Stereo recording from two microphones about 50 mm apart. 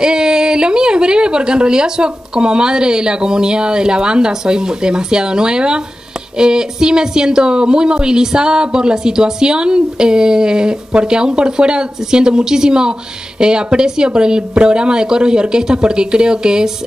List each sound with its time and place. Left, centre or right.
0.0 s speech: centre